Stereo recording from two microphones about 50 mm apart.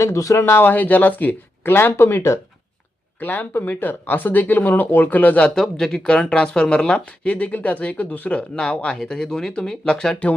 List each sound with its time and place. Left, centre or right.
0.0 s speech: left
0.6 s speech: left
1.6 s speech: left
3.2 s speech: left
5.5 s speech: centre
7.3 s speech: left